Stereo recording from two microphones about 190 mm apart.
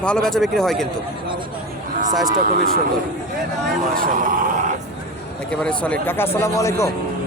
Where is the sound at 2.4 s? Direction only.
50° right (ahead or behind).